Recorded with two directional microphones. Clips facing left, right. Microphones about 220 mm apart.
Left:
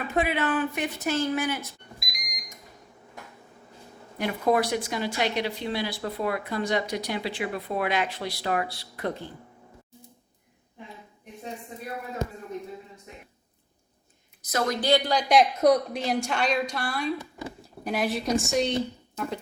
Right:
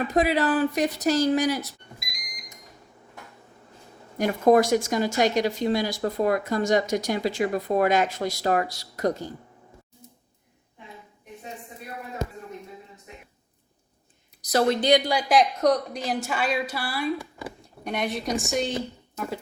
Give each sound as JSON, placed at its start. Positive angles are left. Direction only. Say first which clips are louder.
{"t": 0.1, "sound": "speech", "louder": "right 2 dB", "side_deg": -40}
{"t": 4.2, "sound": "speech", "louder": "right 6 dB", "side_deg": -45}
{"t": 14.4, "sound": "a woman's voice", "louder": "right 6 dB", "side_deg": -35}
{"t": 14.8, "sound": "speech", "louder": "right 2 dB", "side_deg": -15}
{"t": 15.3, "sound": "a woman's voice", "louder": "left 1 dB", "side_deg": 5}